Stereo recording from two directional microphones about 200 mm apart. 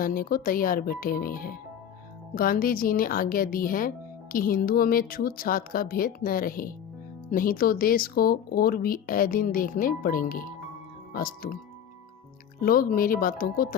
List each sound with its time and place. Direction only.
0.0 s speech: 45° left (ahead or behind)
12.5 s speech: 45° left (ahead or behind)